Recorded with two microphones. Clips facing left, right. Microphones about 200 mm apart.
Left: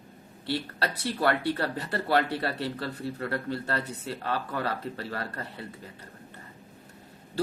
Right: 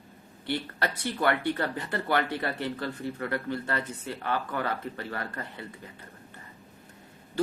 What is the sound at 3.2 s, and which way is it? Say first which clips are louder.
Speech: even; 30° left (ahead or behind).